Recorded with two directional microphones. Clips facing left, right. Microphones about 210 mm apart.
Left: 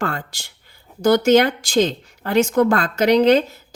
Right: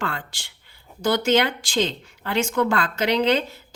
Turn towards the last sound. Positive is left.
turn(degrees=45)  # may be behind; listen again after turning